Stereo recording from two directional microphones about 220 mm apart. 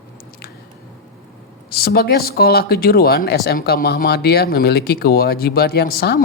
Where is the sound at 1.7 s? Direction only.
45° left (ahead or behind).